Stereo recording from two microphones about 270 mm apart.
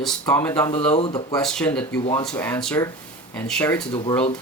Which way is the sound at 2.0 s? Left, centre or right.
Centre.